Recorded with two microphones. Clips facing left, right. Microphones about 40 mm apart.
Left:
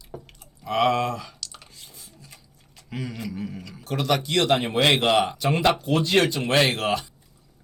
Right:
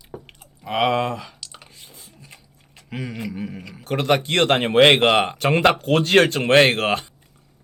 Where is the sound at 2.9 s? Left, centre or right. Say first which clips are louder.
Right 3 dB; right.